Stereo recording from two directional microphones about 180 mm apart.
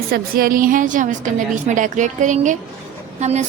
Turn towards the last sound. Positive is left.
turn(degrees=-40)  # may be behind; listen again after turning